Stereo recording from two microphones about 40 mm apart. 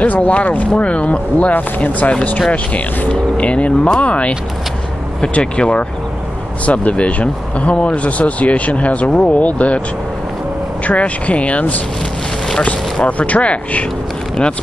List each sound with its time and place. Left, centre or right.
0.0 s speech: left
1.5 s speech: left
5.4 s speech: left
6.6 s speech: left
10.8 s speech: left
13.0 s speech: left